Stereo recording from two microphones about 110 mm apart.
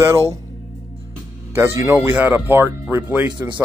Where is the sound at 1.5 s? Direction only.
25° right (ahead or behind).